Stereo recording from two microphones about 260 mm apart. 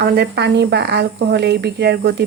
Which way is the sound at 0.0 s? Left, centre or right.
Right.